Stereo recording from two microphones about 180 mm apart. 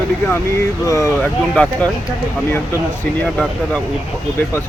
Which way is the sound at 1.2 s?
5° left (ahead or behind).